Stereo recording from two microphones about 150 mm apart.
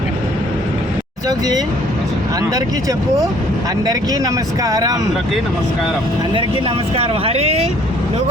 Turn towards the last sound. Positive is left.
turn(degrees=-45)  # may be behind; listen again after turning